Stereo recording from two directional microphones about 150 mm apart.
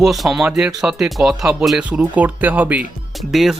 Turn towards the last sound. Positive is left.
turn(degrees=0)  # may be behind; listen again after turning